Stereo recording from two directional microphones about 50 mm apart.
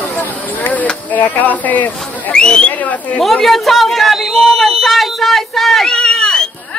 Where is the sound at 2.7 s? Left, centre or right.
Left.